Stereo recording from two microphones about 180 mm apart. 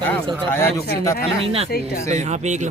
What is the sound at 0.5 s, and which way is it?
Speech, 15° left (ahead or behind).